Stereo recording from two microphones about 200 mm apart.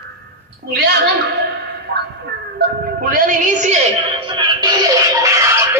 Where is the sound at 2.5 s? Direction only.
45° right (ahead or behind).